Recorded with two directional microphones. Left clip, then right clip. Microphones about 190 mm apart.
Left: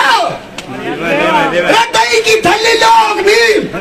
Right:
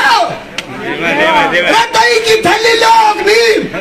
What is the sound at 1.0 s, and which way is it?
Speech, 50° left (ahead or behind).